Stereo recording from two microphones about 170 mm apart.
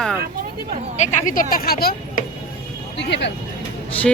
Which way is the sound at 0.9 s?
45° left (ahead or behind).